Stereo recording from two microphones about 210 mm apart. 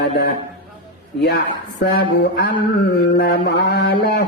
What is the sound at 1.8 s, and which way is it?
Speech, 50° left (ahead or behind).